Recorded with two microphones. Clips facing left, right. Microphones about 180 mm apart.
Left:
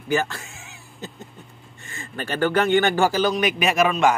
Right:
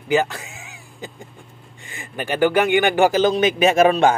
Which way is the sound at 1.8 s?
15° right (ahead or behind).